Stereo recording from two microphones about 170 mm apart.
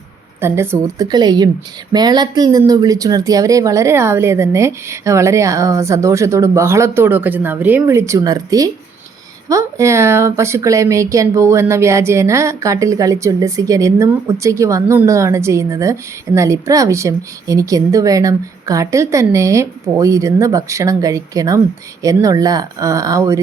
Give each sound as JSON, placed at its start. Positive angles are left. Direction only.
{"t": 0.3, "sound": "speech", "side_deg": -15}